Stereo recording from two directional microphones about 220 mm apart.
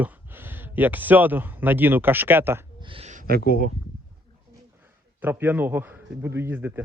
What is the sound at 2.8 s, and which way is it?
Speech, 25° right (ahead or behind).